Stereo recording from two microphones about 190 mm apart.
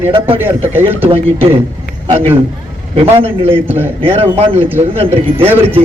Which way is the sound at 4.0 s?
30° right (ahead or behind).